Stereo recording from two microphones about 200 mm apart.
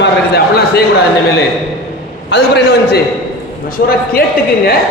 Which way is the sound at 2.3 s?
60° left (ahead or behind).